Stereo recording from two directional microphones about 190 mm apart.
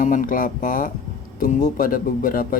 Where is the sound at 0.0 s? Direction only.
45° left (ahead or behind).